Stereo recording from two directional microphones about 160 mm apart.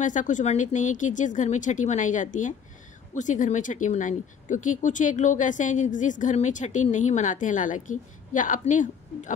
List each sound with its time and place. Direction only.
0.0 s speech: 50° left (ahead or behind)